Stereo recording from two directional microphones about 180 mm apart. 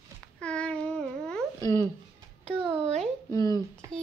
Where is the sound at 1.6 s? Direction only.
20° left (ahead or behind).